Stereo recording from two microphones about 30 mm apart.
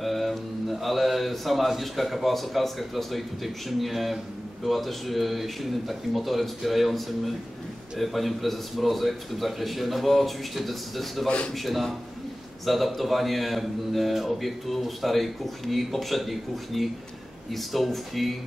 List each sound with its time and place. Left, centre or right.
0.0 s a man's voice: centre
11.2 s a man's voice: left
11.5 s a man's voice: centre